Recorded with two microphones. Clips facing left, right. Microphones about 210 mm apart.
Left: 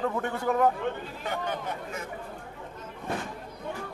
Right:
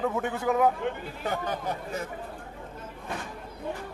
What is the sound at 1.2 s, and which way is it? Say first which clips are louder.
Speech: right 2 dB; 35° right (ahead or behind).